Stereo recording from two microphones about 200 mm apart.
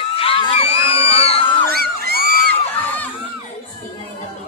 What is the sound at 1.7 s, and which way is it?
Crowd, 50° right (ahead or behind).